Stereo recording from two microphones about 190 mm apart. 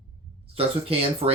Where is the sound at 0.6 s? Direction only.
30° right (ahead or behind).